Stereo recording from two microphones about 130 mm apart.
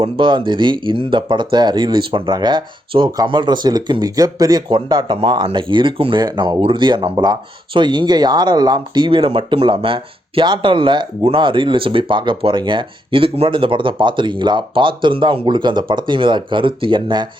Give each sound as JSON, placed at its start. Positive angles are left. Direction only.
{"t": 0.0, "sound": "speech", "side_deg": -40}